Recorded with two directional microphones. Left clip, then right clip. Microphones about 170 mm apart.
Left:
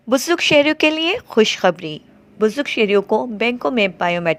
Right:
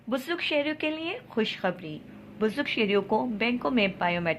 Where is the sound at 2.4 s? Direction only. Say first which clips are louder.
Left 10 dB; 45° left (ahead or behind).